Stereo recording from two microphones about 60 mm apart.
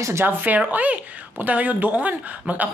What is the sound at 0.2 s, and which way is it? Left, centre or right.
Speech, right.